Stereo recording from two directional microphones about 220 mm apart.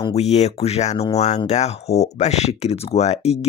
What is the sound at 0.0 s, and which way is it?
Speech, 30° left (ahead or behind).